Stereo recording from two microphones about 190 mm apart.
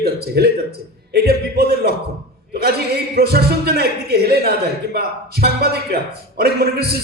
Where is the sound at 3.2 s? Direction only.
55° right (ahead or behind).